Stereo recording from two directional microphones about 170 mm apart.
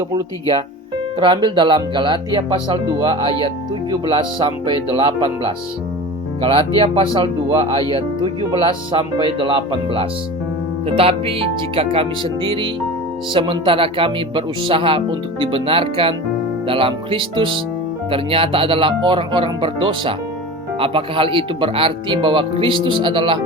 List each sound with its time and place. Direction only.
1.2 s speech: 30° right (ahead or behind)